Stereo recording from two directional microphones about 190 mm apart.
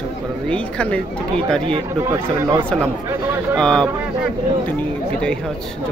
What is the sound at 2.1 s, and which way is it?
Speech, 15° right (ahead or behind).